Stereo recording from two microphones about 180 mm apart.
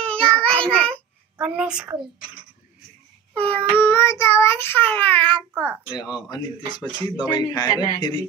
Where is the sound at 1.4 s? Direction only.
5° right (ahead or behind).